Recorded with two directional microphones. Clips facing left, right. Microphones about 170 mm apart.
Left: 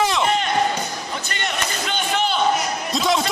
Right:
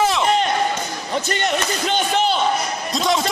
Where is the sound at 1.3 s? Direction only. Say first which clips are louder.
Right 5 dB; 40° right (ahead or behind).